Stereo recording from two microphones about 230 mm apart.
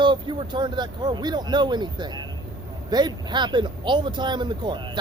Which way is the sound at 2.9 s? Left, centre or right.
Centre.